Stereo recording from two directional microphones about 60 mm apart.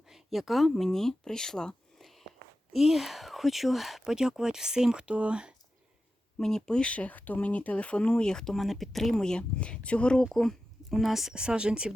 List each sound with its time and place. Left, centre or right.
0.1 s speech: centre
2.7 s speech: centre
6.4 s speech: centre
9.1 s speech: centre
10.3 s a woman's voice: centre